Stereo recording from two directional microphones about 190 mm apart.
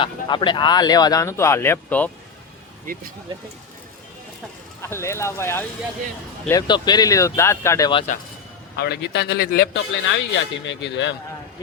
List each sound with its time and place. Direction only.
0.0 s speech: 25° left (ahead or behind)
2.8 s speech: 50° right (ahead or behind)
4.8 s speech: 15° left (ahead or behind)
8.7 s speech: 60° left (ahead or behind)